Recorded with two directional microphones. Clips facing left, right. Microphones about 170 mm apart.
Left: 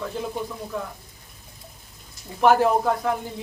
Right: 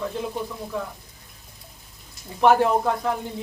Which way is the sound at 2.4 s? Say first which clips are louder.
Even; centre (ahead or behind).